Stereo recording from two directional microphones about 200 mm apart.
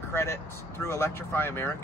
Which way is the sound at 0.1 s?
15° left (ahead or behind).